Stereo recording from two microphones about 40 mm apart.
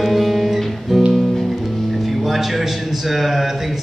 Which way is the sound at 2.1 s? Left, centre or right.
Centre.